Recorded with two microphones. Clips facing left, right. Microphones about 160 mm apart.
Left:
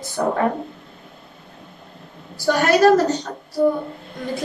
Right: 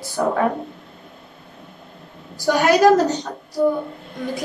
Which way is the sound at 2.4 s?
15° right (ahead or behind).